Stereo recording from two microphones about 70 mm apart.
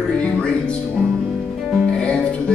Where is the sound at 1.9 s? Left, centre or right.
Centre.